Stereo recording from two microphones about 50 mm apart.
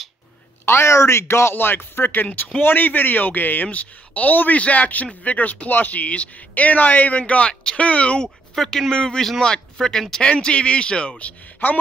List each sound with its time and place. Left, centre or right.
0.7 s a man's voice: left
8.5 s speech: centre
10.2 s speech: centre